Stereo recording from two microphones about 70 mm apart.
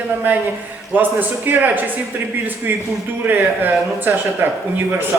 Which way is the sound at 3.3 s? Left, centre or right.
Right.